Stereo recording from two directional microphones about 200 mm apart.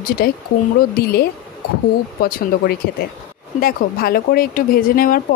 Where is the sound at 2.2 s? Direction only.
50° left (ahead or behind).